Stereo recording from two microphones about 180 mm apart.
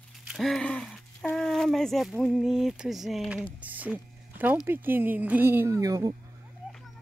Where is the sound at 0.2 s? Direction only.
Centre (ahead or behind); by 6.1 s 20° right (ahead or behind).